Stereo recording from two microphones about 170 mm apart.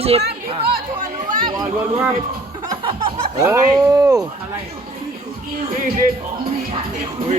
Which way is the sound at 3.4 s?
20° right (ahead or behind).